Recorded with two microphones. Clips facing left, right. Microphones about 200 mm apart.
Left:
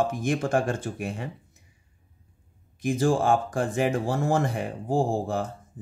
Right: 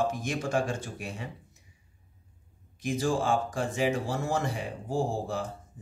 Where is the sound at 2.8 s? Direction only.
55° left (ahead or behind).